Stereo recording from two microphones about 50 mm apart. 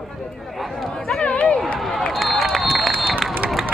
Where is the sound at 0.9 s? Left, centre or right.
Centre.